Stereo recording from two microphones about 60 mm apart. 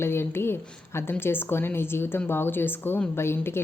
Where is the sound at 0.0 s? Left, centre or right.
Left.